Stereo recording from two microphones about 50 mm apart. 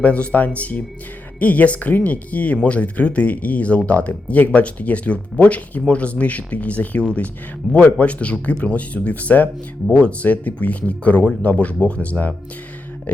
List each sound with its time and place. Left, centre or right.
0.0 s speech: left